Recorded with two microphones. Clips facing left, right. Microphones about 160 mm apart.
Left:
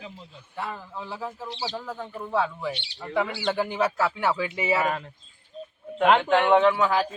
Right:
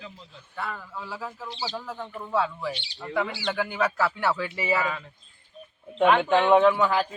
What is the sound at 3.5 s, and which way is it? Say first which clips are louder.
Speech: even; 25° left (ahead or behind).